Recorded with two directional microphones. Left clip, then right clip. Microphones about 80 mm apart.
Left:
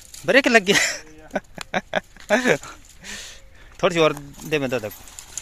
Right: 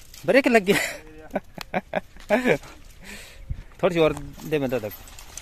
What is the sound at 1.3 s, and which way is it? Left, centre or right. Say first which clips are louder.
Livestock: left 3 dB; centre.